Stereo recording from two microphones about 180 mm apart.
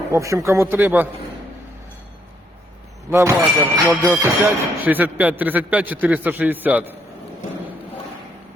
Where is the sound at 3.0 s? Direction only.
15° right (ahead or behind).